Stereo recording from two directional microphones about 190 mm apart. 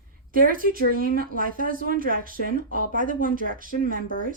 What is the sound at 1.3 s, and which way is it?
A woman's voice, 45° right (ahead or behind).